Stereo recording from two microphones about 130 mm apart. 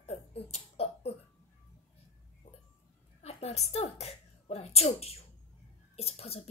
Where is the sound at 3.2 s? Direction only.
55° left (ahead or behind).